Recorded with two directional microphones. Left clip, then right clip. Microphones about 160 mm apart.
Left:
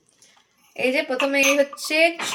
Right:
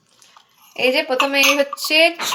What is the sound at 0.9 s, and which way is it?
Speech, 20° left (ahead or behind).